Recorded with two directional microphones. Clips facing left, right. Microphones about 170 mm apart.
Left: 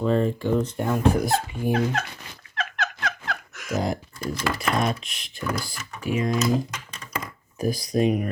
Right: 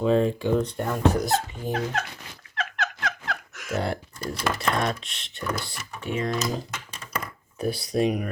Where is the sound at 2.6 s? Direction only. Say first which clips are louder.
Left 1 dB; 85° left.